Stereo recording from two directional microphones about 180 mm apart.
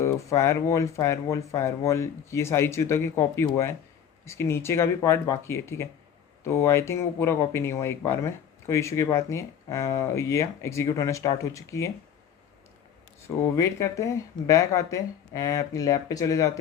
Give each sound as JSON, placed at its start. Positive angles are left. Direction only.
{"t": 0.0, "sound": "speech", "side_deg": 15}
{"t": 13.2, "sound": "speech", "side_deg": 15}